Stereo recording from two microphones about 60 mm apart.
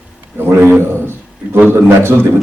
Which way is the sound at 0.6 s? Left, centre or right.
Right.